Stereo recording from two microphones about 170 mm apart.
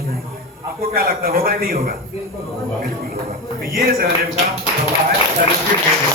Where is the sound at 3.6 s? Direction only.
60° right (ahead or behind).